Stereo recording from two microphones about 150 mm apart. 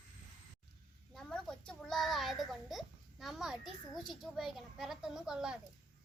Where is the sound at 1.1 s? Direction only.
5° left (ahead or behind).